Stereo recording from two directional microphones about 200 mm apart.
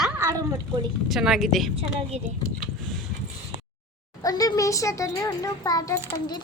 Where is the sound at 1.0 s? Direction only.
Centre (ahead or behind).